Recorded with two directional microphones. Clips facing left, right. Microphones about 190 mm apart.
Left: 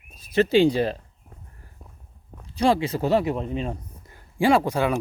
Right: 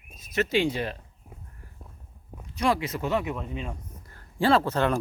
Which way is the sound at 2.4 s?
30° left (ahead or behind).